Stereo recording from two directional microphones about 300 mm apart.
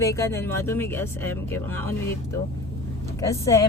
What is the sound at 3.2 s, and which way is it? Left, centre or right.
Speech, centre.